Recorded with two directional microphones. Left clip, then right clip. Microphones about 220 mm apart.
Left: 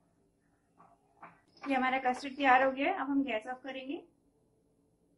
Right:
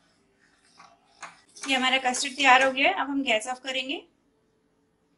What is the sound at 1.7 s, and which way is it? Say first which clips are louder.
A woman's voice: right 7 dB; 40° right (ahead or behind).